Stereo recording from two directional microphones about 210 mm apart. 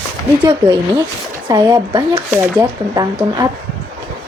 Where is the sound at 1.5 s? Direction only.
15° right (ahead or behind).